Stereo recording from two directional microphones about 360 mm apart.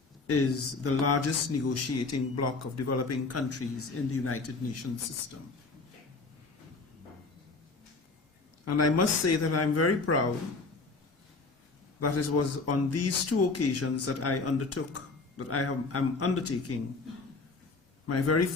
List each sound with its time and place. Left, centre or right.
0.8 s speech: left
8.6 s speech: left
11.9 s speech: left
18.1 s speech: left